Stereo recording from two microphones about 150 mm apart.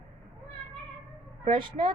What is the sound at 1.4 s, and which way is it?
Speech, 30° right (ahead or behind).